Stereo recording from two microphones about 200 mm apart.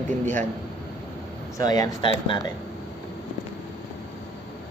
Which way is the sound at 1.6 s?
20° left (ahead or behind).